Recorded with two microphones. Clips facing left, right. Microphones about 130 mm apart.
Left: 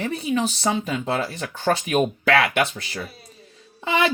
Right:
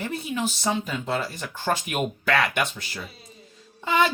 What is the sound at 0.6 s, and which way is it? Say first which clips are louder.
Speech: left 3 dB; 70° left (ahead or behind).